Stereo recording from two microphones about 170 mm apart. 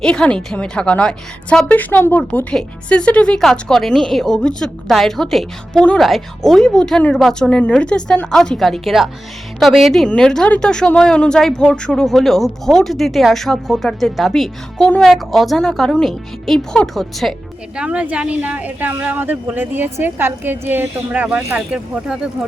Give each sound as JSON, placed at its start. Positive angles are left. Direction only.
{"t": 0.0, "sound": "a woman's voice", "side_deg": 5}